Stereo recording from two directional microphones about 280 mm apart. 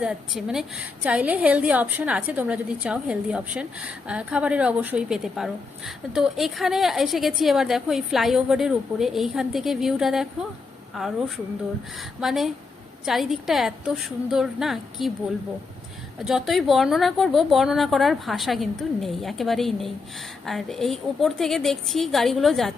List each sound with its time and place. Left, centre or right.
0.0 s a woman's voice: centre
12.2 s a woman's voice: centre
16.2 s a woman's voice: centre